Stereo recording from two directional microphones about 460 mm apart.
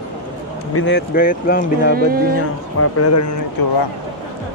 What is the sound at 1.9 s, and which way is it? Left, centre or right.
Speech, centre.